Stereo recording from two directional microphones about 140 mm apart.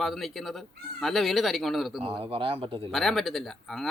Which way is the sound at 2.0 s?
40° right (ahead or behind).